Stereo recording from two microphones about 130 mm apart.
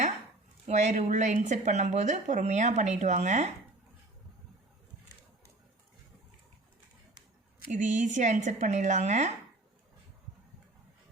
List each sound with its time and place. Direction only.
0.7 s speech: 65° right (ahead or behind)
7.7 s speech: 70° right (ahead or behind)